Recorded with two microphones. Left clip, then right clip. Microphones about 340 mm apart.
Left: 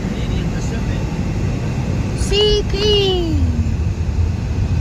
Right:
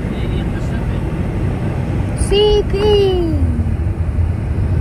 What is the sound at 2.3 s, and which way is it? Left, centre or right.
Child singing, left.